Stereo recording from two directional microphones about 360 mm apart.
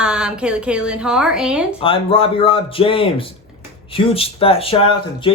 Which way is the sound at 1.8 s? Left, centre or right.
Centre.